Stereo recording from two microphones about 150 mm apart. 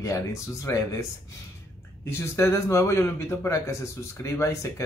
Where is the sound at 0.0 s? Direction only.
20° left (ahead or behind).